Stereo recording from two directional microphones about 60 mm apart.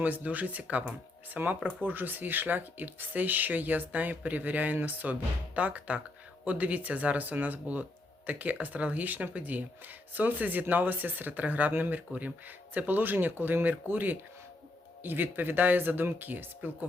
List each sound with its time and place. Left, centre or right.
0.0 s speech: right